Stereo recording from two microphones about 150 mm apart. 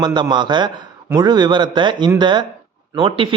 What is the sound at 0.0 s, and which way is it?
A man's voice, 30° right (ahead or behind).